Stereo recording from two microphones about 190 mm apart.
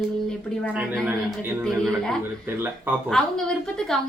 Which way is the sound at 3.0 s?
5° left (ahead or behind).